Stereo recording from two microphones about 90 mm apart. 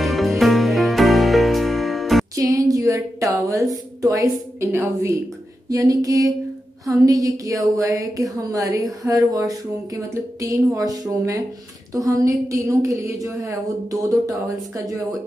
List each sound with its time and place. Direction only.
0.0 s music: centre (ahead or behind)
2.3 s speech: 40° right (ahead or behind)
4.6 s a woman's voice: 25° right (ahead or behind)
5.7 s a woman's voice: 40° right (ahead or behind)